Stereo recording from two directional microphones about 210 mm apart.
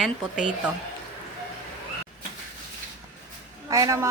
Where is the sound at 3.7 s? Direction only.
15° right (ahead or behind).